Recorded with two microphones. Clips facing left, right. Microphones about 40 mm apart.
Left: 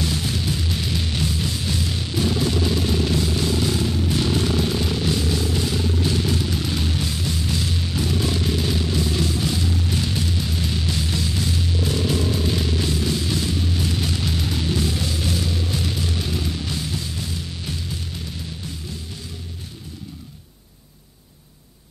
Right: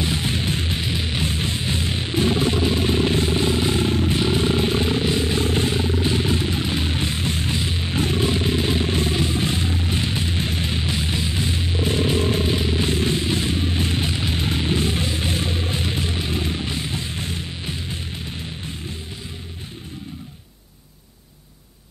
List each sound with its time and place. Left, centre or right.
0.0 s music: right
4.2 s vehicle: right
12.5 s music: right